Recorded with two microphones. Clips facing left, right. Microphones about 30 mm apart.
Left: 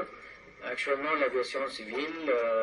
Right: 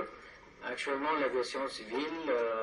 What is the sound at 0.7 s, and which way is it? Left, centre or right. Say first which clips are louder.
A man's voice: left 3 dB; left.